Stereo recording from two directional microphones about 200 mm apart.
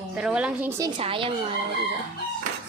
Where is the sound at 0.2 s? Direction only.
5° right (ahead or behind).